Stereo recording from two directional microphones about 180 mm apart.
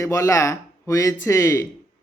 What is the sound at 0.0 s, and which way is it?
Speech, 15° left (ahead or behind).